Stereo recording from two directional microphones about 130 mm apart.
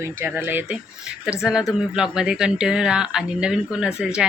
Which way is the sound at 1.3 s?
5° right (ahead or behind).